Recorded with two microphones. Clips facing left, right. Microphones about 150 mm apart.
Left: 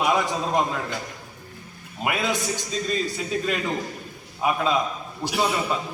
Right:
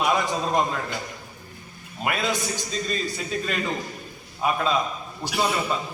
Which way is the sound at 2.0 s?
15° left (ahead or behind).